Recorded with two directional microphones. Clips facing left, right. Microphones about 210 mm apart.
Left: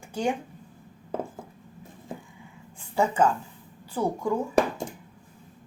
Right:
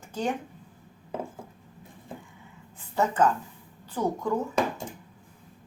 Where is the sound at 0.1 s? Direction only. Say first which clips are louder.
Left 2 dB; 10° left (ahead or behind).